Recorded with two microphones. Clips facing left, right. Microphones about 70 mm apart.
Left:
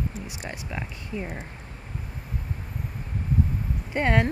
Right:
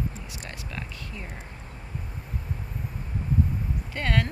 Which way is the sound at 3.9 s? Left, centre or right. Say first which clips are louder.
Left 5 dB; left.